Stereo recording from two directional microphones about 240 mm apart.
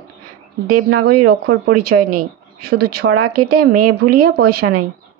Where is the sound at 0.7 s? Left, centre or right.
Right.